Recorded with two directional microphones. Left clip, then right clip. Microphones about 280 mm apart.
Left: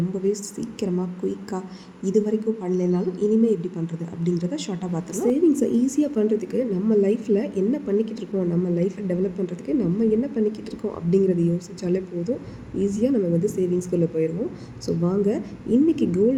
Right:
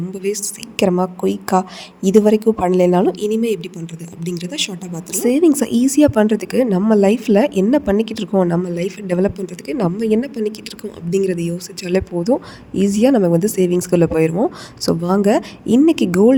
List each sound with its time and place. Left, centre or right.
0.3 s a woman's voice: right